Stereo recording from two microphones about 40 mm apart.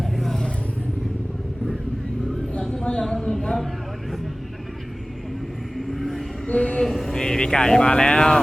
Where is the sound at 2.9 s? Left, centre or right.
Centre.